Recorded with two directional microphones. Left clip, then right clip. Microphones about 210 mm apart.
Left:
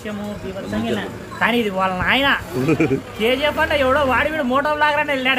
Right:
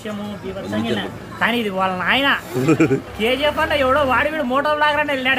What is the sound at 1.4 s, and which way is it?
A man's voice, centre (ahead or behind).